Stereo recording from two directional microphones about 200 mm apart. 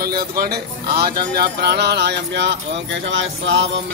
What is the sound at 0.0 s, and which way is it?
Speech, 50° right (ahead or behind).